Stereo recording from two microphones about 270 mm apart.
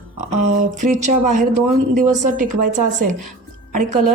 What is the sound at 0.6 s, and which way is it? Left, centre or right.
Speech, right.